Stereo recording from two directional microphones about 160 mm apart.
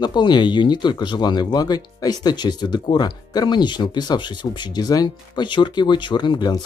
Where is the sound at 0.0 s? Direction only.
30° left (ahead or behind).